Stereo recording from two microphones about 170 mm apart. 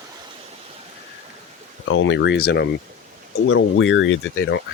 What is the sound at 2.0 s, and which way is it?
Speech, 90° left.